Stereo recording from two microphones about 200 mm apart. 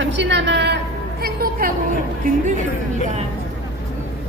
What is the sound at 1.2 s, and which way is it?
Speech, 45° right (ahead or behind).